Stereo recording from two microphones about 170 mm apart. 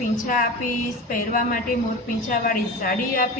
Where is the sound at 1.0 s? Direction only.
55° left (ahead or behind).